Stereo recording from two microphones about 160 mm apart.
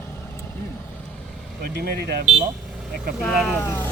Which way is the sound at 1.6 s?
75° right (ahead or behind).